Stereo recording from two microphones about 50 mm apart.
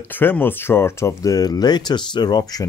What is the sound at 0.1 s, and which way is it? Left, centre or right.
Speech, left.